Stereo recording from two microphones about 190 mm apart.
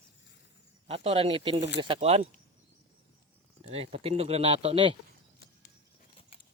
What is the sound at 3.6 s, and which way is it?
Speech, 30° right (ahead or behind).